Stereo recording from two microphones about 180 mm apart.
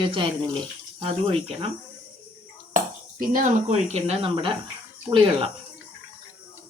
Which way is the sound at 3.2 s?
45° right (ahead or behind).